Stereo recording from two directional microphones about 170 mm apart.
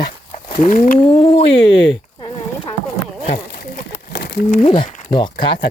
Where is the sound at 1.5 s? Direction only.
90° left.